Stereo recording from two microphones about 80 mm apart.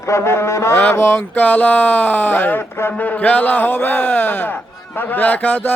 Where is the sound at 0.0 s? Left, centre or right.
Left.